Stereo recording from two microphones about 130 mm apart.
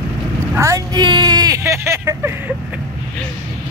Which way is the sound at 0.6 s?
25° right (ahead or behind).